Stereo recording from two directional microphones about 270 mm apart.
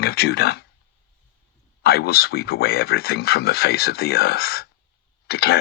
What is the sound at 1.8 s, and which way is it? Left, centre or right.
Speech, left.